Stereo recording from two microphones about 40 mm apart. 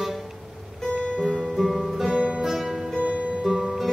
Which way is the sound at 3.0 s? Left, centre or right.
Right.